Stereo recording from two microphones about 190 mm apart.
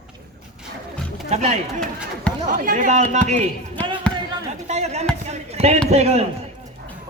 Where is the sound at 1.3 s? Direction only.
35° right (ahead or behind).